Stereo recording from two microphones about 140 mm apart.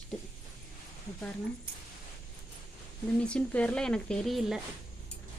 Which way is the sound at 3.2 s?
10° left (ahead or behind).